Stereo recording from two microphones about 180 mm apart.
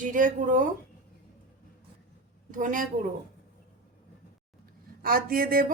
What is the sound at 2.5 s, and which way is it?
Speech, 45° right (ahead or behind).